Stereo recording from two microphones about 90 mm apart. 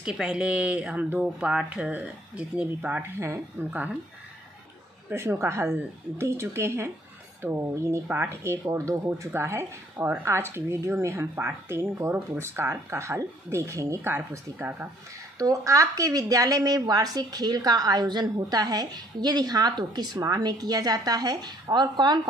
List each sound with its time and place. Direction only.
0.0 s speech: 10° right (ahead or behind)
5.1 s speech: 30° right (ahead or behind)
8.5 s speech: 35° right (ahead or behind); by 14.9 s 20° right (ahead or behind)
15.3 s speech: 40° right (ahead or behind)